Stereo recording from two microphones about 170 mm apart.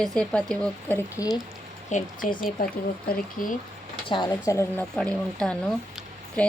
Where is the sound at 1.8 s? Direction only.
50° left (ahead or behind).